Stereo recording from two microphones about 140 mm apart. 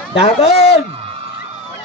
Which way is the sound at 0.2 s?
45° left (ahead or behind).